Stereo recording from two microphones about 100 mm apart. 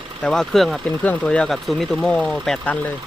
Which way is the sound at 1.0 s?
15° left (ahead or behind).